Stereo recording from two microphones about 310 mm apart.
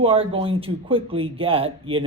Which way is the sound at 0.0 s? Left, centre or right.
Centre.